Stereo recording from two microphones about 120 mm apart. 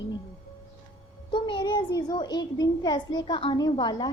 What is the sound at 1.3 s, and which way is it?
A woman's voice, 45° left (ahead or behind).